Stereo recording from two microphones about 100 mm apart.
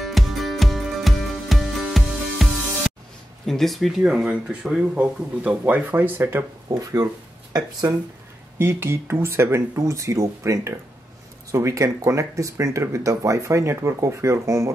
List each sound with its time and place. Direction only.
0.0 s music: centre (ahead or behind)
3.4 s speech: centre (ahead or behind); by 6.4 s 20° right (ahead or behind)
6.7 s speech: 35° right (ahead or behind)
8.5 s speech: 25° right (ahead or behind)